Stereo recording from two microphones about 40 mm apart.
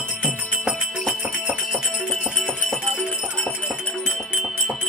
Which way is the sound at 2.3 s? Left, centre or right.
Centre.